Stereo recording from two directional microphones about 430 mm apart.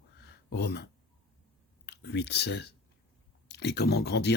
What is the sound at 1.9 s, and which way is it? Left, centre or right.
Speech, left.